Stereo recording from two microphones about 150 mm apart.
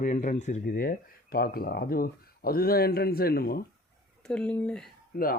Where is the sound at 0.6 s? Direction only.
80° left.